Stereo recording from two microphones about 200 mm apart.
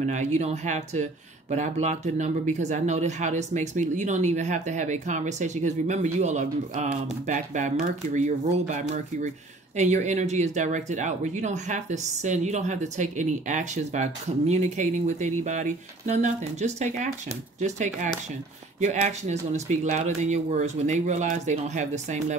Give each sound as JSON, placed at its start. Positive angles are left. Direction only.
{"t": 0.0, "sound": "speech", "side_deg": -35}